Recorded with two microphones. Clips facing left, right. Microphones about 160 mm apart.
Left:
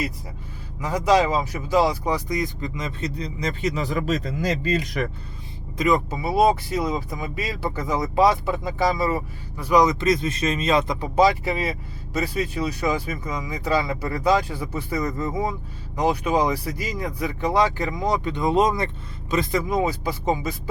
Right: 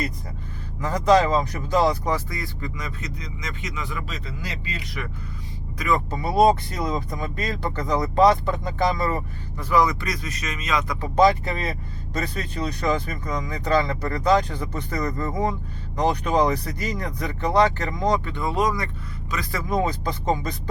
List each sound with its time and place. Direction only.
0.8 s speech: 10° left (ahead or behind); by 5.0 s 45° left (ahead or behind)
5.7 s speech: 20° left (ahead or behind)
6.1 s speech: 5° left (ahead or behind); by 10.9 s 30° left (ahead or behind)
11.0 s speech: 10° left (ahead or behind)
19.7 s speech: 10° left (ahead or behind)